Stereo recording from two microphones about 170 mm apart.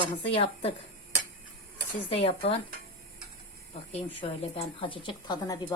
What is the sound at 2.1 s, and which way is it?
Speech, 35° left (ahead or behind).